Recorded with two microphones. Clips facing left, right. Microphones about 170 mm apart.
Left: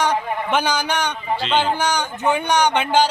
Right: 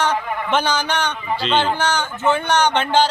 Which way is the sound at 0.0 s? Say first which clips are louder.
Even; 10° left (ahead or behind).